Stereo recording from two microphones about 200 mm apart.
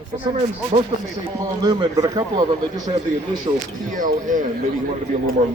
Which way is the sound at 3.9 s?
40° right (ahead or behind).